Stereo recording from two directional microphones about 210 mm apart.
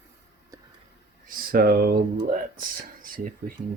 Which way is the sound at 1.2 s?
40° right (ahead or behind).